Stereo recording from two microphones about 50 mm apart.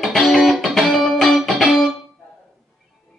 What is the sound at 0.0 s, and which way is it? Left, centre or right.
Music, centre.